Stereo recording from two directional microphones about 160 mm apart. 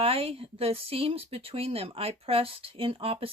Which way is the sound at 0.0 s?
35° right (ahead or behind).